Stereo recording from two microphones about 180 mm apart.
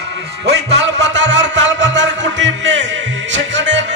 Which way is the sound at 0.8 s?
80° right.